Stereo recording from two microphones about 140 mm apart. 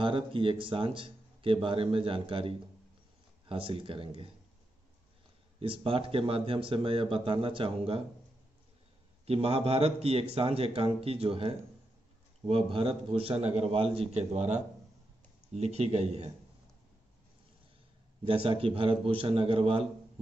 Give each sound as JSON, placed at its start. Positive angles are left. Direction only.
{"t": 0.0, "sound": "speech", "side_deg": -40}
{"t": 5.6, "sound": "speech", "side_deg": -40}
{"t": 9.2, "sound": "speech", "side_deg": -45}
{"t": 18.2, "sound": "speech", "side_deg": -40}